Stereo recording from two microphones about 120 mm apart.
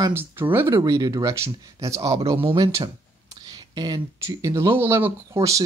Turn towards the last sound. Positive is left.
turn(degrees=-25)  # may be behind; listen again after turning